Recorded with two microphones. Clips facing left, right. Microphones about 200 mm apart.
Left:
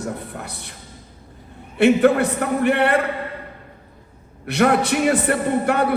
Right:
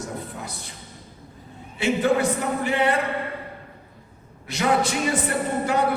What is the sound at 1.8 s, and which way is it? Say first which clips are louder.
A man's voice: left 6 dB; 65° left (ahead or behind).